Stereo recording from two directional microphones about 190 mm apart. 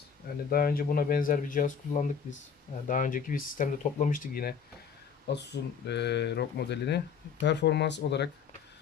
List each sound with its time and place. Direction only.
0.5 s speech: 50° left (ahead or behind)
5.3 s speech: 65° left (ahead or behind)